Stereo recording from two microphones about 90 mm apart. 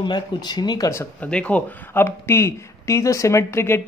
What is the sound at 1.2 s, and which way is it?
Speech, 15° left (ahead or behind).